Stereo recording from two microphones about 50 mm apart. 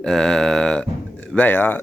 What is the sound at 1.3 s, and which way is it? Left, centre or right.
Speech, left.